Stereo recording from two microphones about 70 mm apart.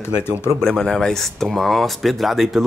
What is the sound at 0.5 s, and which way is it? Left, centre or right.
Speech, centre.